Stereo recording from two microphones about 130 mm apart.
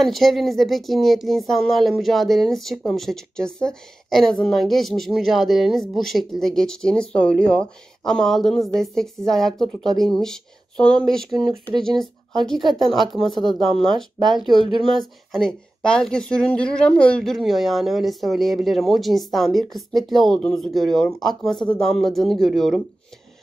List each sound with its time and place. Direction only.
0.0 s speech: centre (ahead or behind)
11.3 s speech: 25° right (ahead or behind)
11.8 s speech: centre (ahead or behind)